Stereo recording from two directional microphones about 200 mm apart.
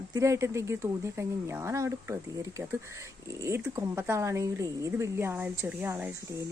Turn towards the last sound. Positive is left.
turn(degrees=-15)  # may be behind; listen again after turning